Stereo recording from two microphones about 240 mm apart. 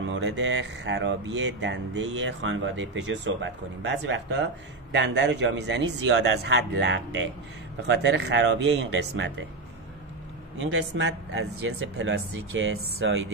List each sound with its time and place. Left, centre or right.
0.0 s speech: right
10.6 s speech: right